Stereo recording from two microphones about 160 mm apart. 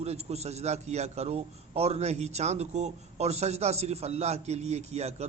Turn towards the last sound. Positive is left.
turn(degrees=-40)  # may be behind; listen again after turning